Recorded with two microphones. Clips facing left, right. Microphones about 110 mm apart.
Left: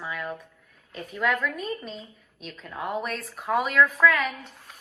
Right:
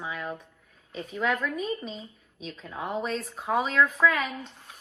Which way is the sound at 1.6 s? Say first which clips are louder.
Right 1 dB; 45° left (ahead or behind).